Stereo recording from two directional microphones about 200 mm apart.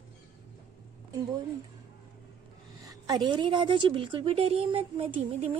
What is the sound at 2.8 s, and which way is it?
A woman's voice, 15° right (ahead or behind).